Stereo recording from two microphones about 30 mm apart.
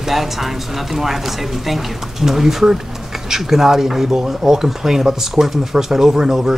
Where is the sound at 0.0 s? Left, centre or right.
Centre.